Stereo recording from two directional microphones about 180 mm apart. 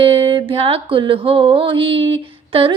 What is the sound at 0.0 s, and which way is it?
Music, 30° right (ahead or behind).